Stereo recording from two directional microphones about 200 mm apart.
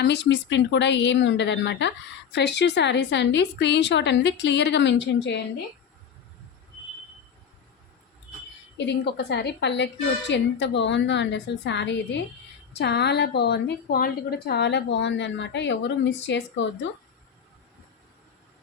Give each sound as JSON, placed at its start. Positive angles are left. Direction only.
{"t": 0.0, "sound": "a woman's voice", "side_deg": 60}
{"t": 8.8, "sound": "a woman's voice", "side_deg": 60}